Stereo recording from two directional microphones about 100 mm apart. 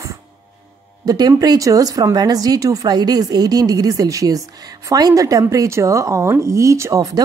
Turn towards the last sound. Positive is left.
turn(degrees=-35)  # may be behind; listen again after turning